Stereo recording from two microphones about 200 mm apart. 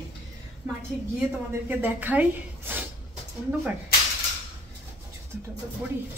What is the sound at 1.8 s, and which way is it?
A woman's voice, 10° right (ahead or behind).